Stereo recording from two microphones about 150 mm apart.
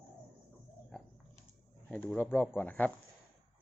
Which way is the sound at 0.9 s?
5° left (ahead or behind).